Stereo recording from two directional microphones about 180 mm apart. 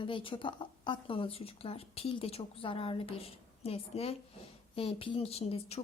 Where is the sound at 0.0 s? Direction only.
30° left (ahead or behind).